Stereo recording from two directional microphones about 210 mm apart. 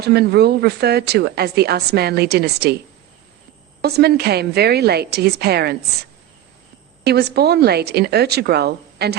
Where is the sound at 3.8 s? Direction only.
50° right (ahead or behind).